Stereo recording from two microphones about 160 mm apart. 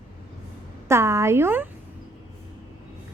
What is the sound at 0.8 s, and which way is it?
Speech, 15° right (ahead or behind).